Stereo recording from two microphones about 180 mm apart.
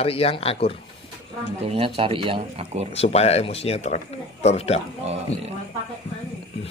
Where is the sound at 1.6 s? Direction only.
35° right (ahead or behind).